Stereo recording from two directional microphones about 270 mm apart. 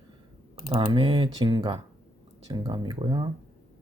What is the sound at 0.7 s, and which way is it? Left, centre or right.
Speech, centre.